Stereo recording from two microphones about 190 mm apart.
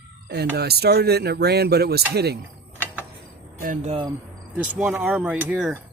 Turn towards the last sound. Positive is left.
turn(degrees=-5)  # may be behind; listen again after turning